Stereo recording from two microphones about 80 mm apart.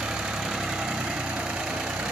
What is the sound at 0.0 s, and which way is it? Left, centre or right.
Vehicle, centre.